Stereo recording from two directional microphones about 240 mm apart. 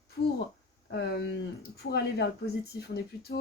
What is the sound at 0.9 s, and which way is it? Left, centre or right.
Speech, left.